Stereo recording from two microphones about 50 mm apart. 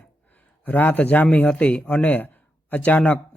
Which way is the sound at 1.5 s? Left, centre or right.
Left.